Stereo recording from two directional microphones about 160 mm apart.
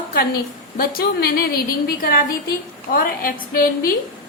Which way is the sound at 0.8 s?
70° left (ahead or behind).